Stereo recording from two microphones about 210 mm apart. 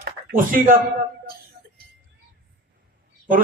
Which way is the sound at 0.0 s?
45° right (ahead or behind).